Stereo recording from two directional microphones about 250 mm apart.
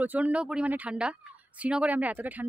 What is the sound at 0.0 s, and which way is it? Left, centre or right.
A woman's voice, centre.